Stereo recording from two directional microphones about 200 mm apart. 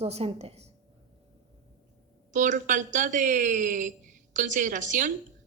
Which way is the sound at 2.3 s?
40° right (ahead or behind).